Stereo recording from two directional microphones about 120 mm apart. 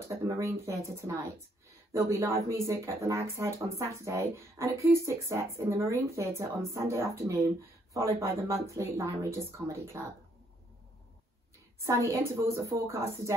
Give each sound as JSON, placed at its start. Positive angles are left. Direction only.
{"t": 0.1, "sound": "speech", "side_deg": -25}
{"t": 11.8, "sound": "speech", "side_deg": -25}